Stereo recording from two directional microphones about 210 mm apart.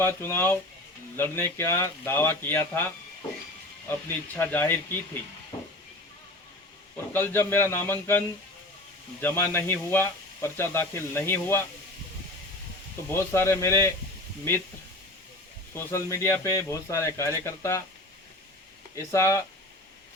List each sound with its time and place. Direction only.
0.0 s speech: 10° left (ahead or behind)
4.4 s speech: 10° left (ahead or behind)
5.5 s a sound: 25° left (ahead or behind)
6.9 s speech: 10° left (ahead or behind)
9.2 s speech: 10° left (ahead or behind)
13.1 s speech: 10° left (ahead or behind)
15.7 s speech: 15° left (ahead or behind)
18.9 s speech: 15° left (ahead or behind)